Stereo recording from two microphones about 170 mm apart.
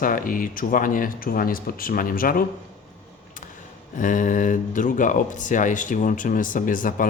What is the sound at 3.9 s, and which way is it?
Speech, 50° left (ahead or behind).